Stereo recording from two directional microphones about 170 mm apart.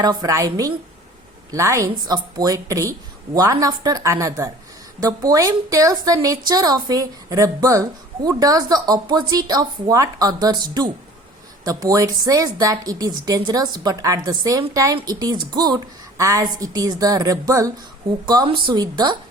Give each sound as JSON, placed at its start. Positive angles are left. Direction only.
{"t": 0.0, "sound": "a woman's voice", "side_deg": -20}